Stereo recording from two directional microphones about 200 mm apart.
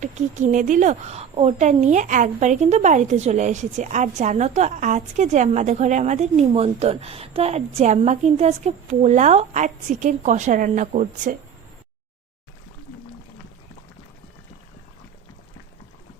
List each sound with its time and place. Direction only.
0.0 s a woman's voice: 35° right (ahead or behind)